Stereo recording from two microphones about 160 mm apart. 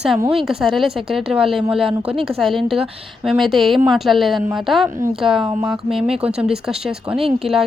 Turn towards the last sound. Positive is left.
turn(degrees=0)  # may be behind; listen again after turning